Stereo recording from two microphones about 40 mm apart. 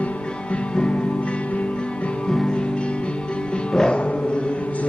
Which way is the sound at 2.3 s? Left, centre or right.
Centre.